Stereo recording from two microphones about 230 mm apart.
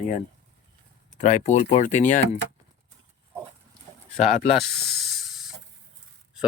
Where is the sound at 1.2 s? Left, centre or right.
Left.